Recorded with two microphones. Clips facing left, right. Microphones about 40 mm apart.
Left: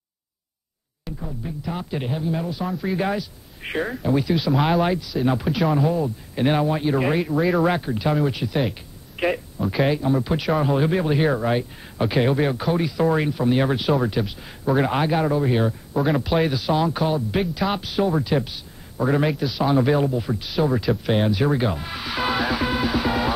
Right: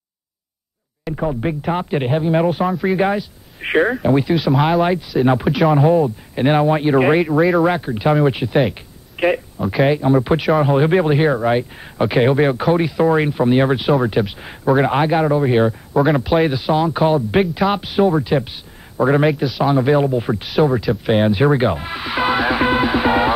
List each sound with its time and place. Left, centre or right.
1.1 s speech: right
1.6 s speech: right
3.6 s speech: right
4.4 s speech: centre
4.8 s speech: right
7.4 s speech: centre
7.9 s speech: right
10.1 s speech: right
14.7 s speech: centre
16.0 s speech: centre
17.0 s speech: right
19.4 s speech: centre
20.1 s speech: right
20.4 s speech: centre